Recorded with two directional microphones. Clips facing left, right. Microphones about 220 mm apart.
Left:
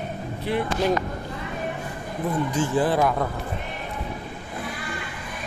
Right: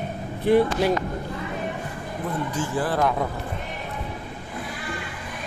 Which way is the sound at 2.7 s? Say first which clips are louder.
Left 3 dB; 20° left (ahead or behind).